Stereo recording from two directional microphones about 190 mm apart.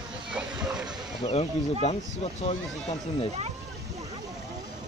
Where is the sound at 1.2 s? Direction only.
35° left (ahead or behind).